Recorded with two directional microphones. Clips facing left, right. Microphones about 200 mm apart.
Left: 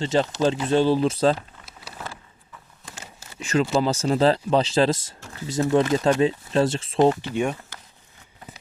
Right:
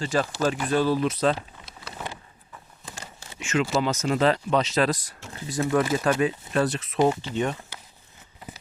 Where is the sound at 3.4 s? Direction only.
35° left (ahead or behind).